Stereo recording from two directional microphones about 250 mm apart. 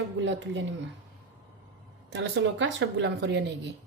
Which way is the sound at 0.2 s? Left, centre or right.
Right.